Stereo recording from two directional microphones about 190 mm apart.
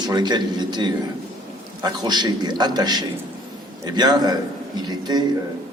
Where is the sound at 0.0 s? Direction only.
20° right (ahead or behind).